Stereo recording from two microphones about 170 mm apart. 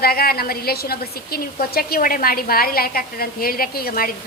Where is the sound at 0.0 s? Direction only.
65° left (ahead or behind).